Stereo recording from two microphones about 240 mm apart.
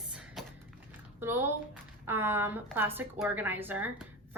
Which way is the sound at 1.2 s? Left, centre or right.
Centre.